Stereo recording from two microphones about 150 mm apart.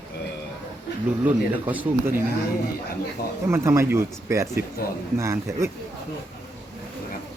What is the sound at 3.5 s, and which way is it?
A man's voice, 15° right (ahead or behind).